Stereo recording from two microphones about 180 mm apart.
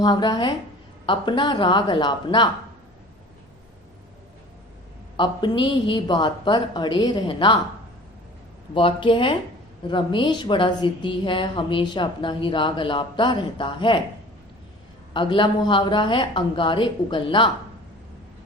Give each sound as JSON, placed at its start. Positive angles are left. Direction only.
{"t": 0.0, "sound": "a woman's voice", "side_deg": 25}
{"t": 5.1, "sound": "a woman's voice", "side_deg": 25}
{"t": 8.7, "sound": "a woman's voice", "side_deg": 30}
{"t": 15.1, "sound": "a woman's voice", "side_deg": 25}